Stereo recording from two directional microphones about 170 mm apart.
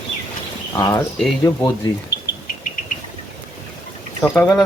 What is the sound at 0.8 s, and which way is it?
Speech, 20° left (ahead or behind).